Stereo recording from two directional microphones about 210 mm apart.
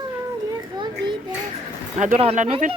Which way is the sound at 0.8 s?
20° right (ahead or behind).